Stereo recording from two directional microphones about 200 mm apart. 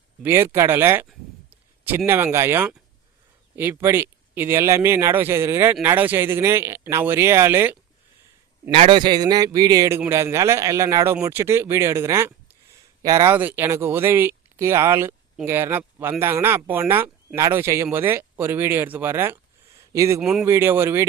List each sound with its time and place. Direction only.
0.2 s speech: 10° right (ahead or behind)
2.0 s speech: 10° right (ahead or behind)
8.7 s speech: 25° right (ahead or behind)